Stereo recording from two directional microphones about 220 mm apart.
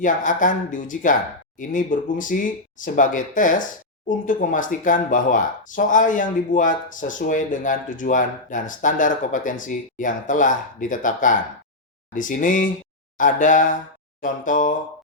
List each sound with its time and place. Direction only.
0.0 s speech: 35° left (ahead or behind)